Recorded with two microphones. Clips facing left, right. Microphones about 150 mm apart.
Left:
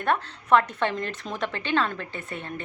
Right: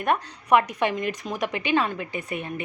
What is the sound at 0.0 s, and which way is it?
A woman's voice, 15° right (ahead or behind).